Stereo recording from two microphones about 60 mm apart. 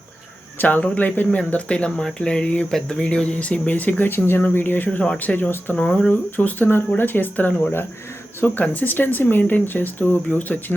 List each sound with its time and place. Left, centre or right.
0.8 s speech: left
1.5 s speech: centre; by 4.9 s left
4.9 s speech: centre
5.7 s speech: centre
6.3 s speech: left